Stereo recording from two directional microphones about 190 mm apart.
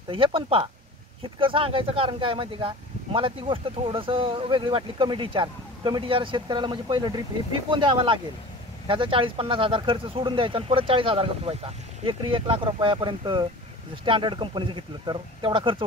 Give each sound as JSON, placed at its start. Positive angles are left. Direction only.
{"t": 0.1, "sound": "speech", "side_deg": -30}